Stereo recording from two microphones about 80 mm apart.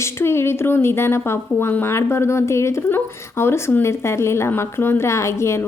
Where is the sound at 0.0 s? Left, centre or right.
Left.